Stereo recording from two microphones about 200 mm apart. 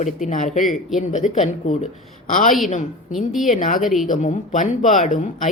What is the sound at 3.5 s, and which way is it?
Speech, 40° left (ahead or behind).